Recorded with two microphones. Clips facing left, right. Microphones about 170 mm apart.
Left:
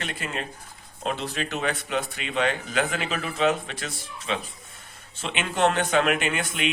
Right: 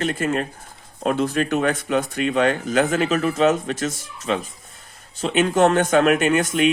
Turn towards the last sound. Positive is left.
turn(degrees=-45)  # may be behind; listen again after turning